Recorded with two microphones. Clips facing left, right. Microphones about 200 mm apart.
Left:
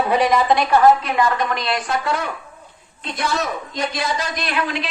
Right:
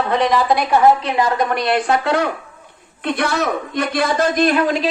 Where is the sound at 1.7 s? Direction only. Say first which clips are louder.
Right 6 dB; 65° right (ahead or behind).